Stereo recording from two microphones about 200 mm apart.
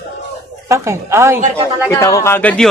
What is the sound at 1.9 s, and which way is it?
Speech, 15° left (ahead or behind).